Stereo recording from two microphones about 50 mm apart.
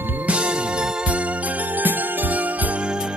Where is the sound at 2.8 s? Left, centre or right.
Centre.